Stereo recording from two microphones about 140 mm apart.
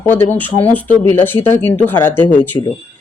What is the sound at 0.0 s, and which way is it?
Speech, 15° left (ahead or behind).